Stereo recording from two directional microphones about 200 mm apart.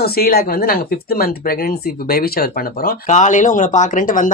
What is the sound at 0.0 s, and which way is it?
Speech, 50° left (ahead or behind).